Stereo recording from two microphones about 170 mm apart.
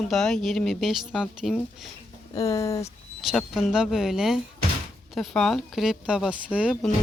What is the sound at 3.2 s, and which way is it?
Speech, centre (ahead or behind).